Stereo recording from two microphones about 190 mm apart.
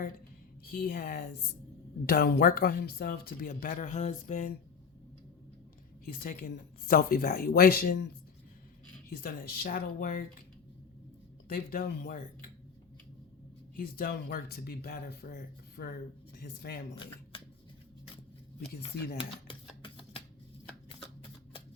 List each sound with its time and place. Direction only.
0.6 s speech: 50° left (ahead or behind)
6.1 s speech: 50° left (ahead or behind)
9.0 s speech: 50° left (ahead or behind)
11.4 s speech: 50° left (ahead or behind)
13.7 s speech: 50° left (ahead or behind)
19.5 s a sound: 25° left (ahead or behind)